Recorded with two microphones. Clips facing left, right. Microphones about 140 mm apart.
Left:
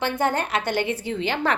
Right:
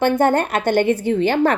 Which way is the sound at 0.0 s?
50° right (ahead or behind).